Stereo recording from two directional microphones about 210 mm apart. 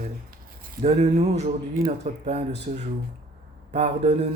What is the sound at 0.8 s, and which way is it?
Speech, 30° right (ahead or behind).